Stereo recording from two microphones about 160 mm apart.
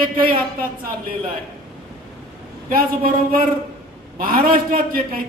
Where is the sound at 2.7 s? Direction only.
65° right (ahead or behind).